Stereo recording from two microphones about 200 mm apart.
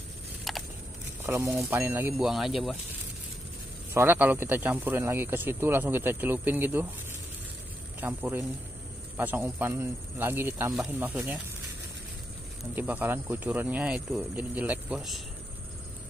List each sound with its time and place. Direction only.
0.5 s a sound: centre (ahead or behind)
1.2 s speech: 10° right (ahead or behind)
3.9 s speech: 10° right (ahead or behind)
8.0 s speech: 10° right (ahead or behind)
12.7 s speech: 10° right (ahead or behind)